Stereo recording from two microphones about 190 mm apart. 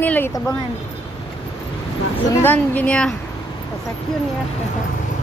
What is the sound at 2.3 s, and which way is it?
Speech, 10° left (ahead or behind).